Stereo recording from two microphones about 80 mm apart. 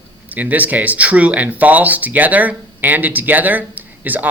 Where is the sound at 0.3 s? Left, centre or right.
Right.